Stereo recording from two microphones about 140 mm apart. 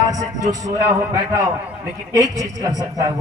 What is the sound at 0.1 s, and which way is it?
A man's voice, 25° right (ahead or behind).